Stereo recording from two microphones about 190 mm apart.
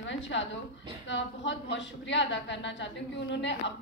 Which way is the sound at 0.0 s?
75° left (ahead or behind).